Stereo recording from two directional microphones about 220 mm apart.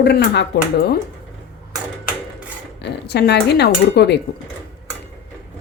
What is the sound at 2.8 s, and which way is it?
Speech, 50° left (ahead or behind).